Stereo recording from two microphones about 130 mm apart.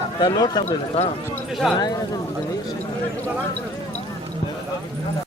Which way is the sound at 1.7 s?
30° left (ahead or behind).